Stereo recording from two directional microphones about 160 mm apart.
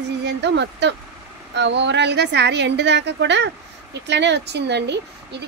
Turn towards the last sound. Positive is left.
turn(degrees=-90)